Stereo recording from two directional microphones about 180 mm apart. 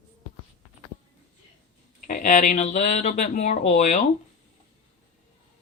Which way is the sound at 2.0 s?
50° left (ahead or behind).